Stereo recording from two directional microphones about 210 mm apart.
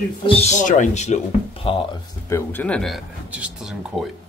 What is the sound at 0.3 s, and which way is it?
Speech, 30° left (ahead or behind).